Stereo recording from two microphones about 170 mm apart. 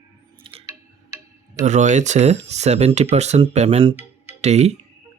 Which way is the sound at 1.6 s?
45° right (ahead or behind).